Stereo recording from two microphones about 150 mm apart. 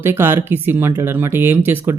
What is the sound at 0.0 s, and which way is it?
Speech, 15° right (ahead or behind).